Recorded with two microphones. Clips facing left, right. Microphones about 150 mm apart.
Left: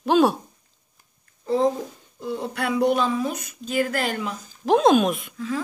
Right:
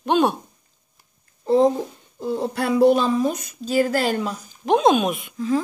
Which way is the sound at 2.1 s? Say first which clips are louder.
Right 4 dB; 30° right (ahead or behind).